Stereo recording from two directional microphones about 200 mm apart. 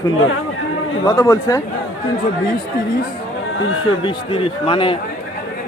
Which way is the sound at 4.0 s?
25° left (ahead or behind).